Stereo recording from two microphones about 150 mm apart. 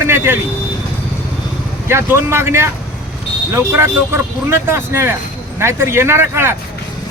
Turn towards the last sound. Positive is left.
turn(degrees=-15)  # may be behind; listen again after turning